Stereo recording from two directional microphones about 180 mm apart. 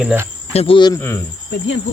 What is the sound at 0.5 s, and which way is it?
Cricket, 30° left (ahead or behind).